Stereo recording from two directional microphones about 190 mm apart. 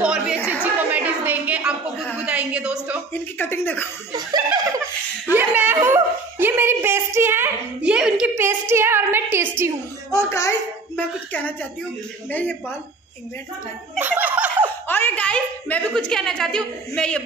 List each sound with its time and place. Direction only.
0.0 s chatter: 5° right (ahead or behind)
0.9 s a sound: 10° right (ahead or behind)
3.3 s speech: 10° left (ahead or behind)
4.1 s laughter: 20° right (ahead or behind)
5.3 s dog: 10° right (ahead or behind)
10.1 s a sound: 15° left (ahead or behind)
12.3 s speech: 10° left (ahead or behind)
13.9 s speech: 10° right (ahead or behind)
14.9 s a woman's voice: 10° left (ahead or behind)